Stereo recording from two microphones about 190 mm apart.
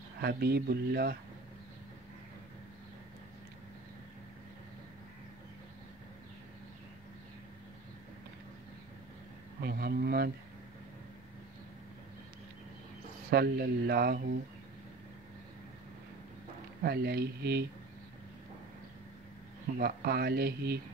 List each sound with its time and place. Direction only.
0.2 s speech: 55° right (ahead or behind)
9.6 s speech: 55° right (ahead or behind)
13.3 s speech: 55° right (ahead or behind)
16.8 s speech: 55° right (ahead or behind)
19.8 s speech: 55° right (ahead or behind)